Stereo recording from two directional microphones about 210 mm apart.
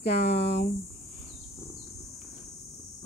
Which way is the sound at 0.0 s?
50° left (ahead or behind).